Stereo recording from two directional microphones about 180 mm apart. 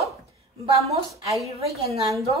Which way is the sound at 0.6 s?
35° right (ahead or behind).